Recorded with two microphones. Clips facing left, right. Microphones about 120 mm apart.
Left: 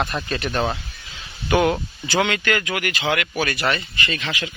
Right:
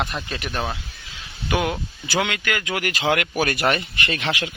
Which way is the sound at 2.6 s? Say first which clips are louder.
Right 1 dB; 30° right (ahead or behind).